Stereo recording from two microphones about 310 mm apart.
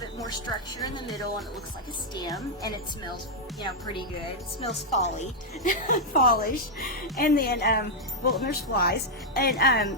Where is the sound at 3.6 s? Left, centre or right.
Centre.